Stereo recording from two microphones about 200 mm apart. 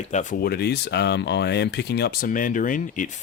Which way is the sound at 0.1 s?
35° left (ahead or behind).